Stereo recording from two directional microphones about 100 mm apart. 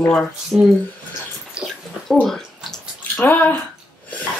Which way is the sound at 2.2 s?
5° left (ahead or behind).